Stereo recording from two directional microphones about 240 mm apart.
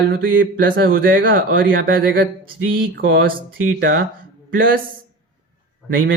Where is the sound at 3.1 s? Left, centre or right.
Right.